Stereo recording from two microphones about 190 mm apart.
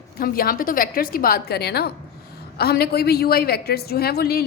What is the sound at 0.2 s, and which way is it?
A woman's voice, 50° left (ahead or behind).